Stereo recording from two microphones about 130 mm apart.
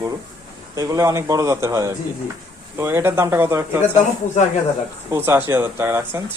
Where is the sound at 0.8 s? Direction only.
25° right (ahead or behind).